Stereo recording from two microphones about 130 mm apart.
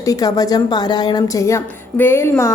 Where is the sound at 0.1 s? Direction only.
25° left (ahead or behind).